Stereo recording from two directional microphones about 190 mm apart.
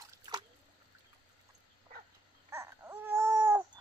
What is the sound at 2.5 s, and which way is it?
Baby cry, 15° right (ahead or behind).